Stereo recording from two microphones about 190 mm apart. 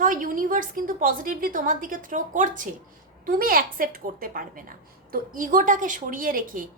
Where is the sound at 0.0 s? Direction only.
45° right (ahead or behind).